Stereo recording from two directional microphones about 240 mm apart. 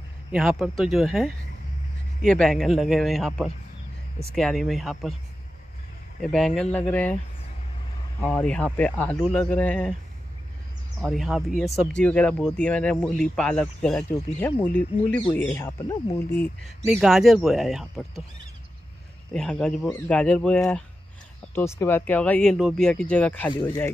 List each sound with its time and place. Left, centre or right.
0.3 s speech: centre
6.2 s speech: centre
8.2 s speech: centre
11.0 s speech: centre
16.8 s speech: centre
19.3 s speech: centre
23.5 s speech: centre